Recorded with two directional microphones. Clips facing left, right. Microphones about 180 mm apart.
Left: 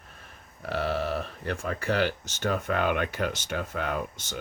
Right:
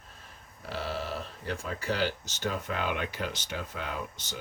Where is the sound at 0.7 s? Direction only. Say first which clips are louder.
Left 6 dB; 60° left (ahead or behind).